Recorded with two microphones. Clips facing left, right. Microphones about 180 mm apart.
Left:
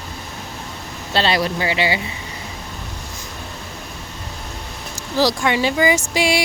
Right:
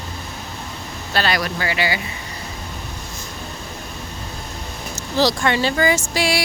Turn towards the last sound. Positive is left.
turn(degrees=20)  # may be behind; listen again after turning